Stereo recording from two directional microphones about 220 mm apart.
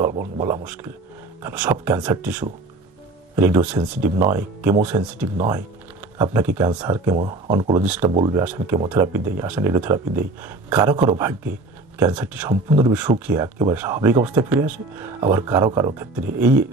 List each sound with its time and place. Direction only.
0.2 s speech: 10° right (ahead or behind)
7.2 s speech: 25° right (ahead or behind)
7.8 s speech: 5° right (ahead or behind)
8.1 s speech: 20° right (ahead or behind)
12.6 s speech: 15° right (ahead or behind)